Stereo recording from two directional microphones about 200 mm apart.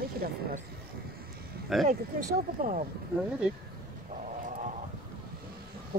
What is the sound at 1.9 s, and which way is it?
Speech, 40° right (ahead or behind).